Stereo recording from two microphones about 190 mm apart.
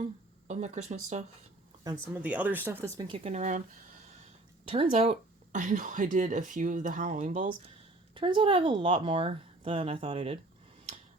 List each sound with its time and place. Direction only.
0.4 s speech: 40° right (ahead or behind)
2.1 s speech: 10° right (ahead or behind)
3.1 s speech: 35° right (ahead or behind)
4.7 s speech: 30° right (ahead or behind)
8.1 s a woman's voice: 25° right (ahead or behind)